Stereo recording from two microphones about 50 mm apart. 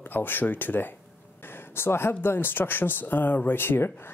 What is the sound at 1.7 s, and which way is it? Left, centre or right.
Speech, left.